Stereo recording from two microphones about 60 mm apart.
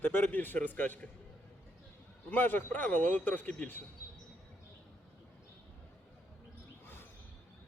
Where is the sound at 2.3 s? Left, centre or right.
Left.